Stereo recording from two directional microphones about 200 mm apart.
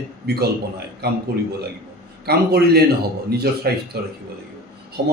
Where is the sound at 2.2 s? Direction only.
55° right (ahead or behind).